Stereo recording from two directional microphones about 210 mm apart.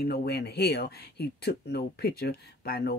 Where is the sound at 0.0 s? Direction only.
50° left (ahead or behind).